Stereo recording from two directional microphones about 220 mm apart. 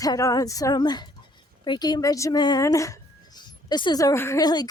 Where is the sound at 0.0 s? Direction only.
15° left (ahead or behind).